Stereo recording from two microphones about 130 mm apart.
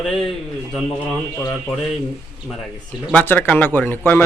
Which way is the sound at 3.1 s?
10° left (ahead or behind).